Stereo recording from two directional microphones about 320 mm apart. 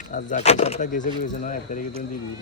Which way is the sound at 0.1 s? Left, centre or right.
Left.